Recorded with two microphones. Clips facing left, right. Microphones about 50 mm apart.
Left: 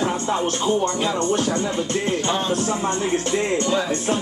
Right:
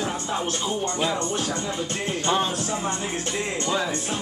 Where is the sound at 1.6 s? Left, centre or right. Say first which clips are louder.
Left 5 dB; left.